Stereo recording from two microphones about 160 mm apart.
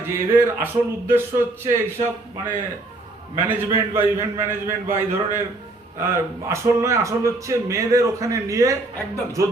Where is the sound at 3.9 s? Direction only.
15° right (ahead or behind).